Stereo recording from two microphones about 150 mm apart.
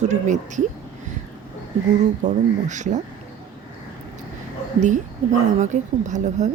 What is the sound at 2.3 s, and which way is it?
Speech, 55° right (ahead or behind).